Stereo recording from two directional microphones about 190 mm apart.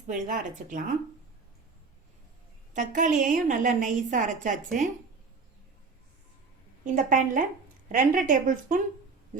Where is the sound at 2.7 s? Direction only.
40° right (ahead or behind).